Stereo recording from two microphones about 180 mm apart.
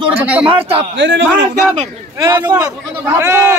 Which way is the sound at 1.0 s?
90° right.